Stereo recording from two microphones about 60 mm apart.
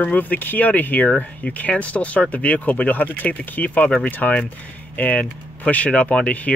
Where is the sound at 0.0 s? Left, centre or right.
Left.